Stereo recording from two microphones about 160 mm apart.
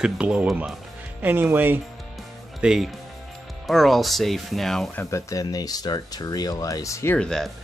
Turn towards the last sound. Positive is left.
turn(degrees=5)  # may be behind; listen again after turning